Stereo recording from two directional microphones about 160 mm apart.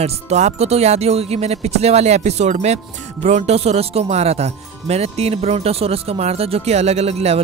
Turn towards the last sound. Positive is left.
turn(degrees=-40)  # may be behind; listen again after turning